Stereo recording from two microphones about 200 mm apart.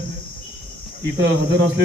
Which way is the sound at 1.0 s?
60° right (ahead or behind).